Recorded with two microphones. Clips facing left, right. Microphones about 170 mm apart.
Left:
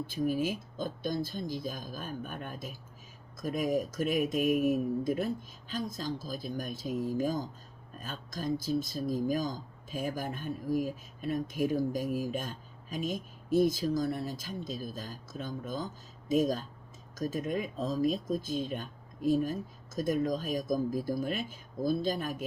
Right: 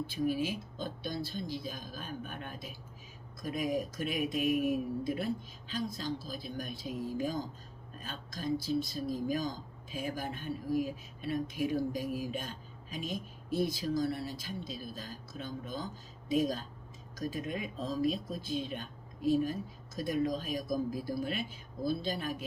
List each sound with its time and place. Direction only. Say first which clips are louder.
0.1 s speech: left 3 dB; 45° left (ahead or behind)